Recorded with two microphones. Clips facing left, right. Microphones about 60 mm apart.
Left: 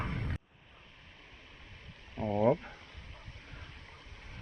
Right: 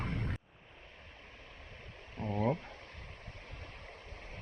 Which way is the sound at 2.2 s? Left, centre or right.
Left.